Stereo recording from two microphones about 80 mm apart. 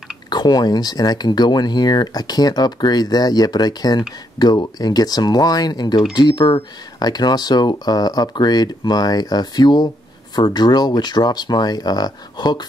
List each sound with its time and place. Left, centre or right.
0.3 s speech: left